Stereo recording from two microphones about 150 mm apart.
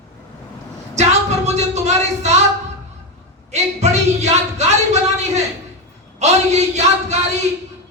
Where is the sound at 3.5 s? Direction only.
50° right (ahead or behind).